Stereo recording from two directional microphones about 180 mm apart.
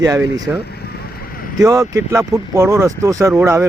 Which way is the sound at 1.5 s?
20° right (ahead or behind).